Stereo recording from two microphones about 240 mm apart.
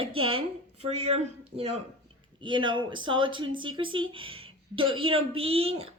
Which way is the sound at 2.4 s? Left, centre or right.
Centre.